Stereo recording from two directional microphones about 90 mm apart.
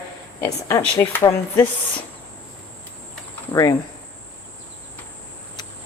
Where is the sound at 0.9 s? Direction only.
30° left (ahead or behind).